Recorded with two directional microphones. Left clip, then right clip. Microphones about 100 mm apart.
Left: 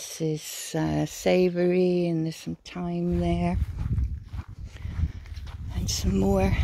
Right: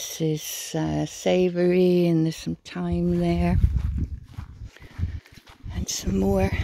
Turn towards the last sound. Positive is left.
turn(degrees=-25)  # may be behind; listen again after turning